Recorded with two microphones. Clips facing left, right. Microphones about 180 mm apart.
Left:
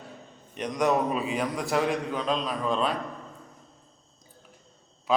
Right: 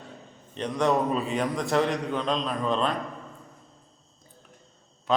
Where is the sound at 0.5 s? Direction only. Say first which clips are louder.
Right 1 dB; 15° left (ahead or behind).